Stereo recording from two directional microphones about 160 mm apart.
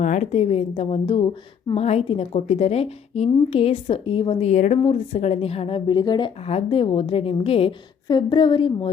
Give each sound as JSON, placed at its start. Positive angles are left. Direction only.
{"t": 0.0, "sound": "a woman's voice", "side_deg": 50}